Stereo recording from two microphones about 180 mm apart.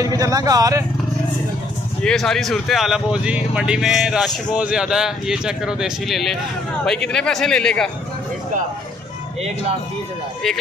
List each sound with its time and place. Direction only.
0.0 s speech: 20° right (ahead or behind)
2.0 s speech: 5° left (ahead or behind)